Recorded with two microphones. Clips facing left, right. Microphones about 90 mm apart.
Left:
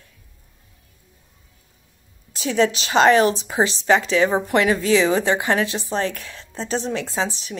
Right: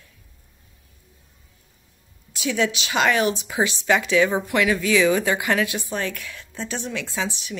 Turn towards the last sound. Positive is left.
turn(degrees=35)  # may be behind; listen again after turning